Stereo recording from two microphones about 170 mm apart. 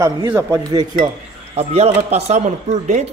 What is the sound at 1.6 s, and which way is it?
Speech, 40° right (ahead or behind).